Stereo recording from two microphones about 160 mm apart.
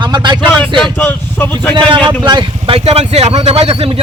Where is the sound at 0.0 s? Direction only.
30° right (ahead or behind).